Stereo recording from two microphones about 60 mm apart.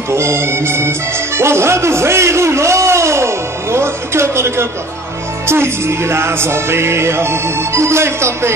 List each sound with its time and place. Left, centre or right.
0.1 s music: right